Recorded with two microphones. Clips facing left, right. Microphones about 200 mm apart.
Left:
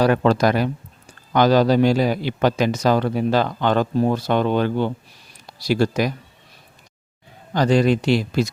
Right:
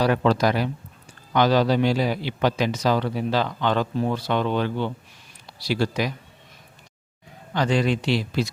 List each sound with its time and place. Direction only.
0.0 s a man's voice: 50° left (ahead or behind)
7.5 s a man's voice: 40° left (ahead or behind)